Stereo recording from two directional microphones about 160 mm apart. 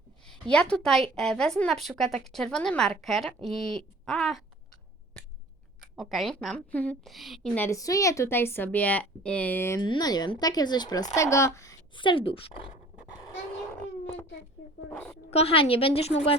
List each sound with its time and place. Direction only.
0.3 s a woman's voice: 5° left (ahead or behind)
6.0 s a woman's voice: centre (ahead or behind)
9.8 s speech: 25° left (ahead or behind)
11.9 s a woman's voice: 30° left (ahead or behind)
13.5 s wail: 15° left (ahead or behind)
15.3 s a woman's voice: 40° left (ahead or behind)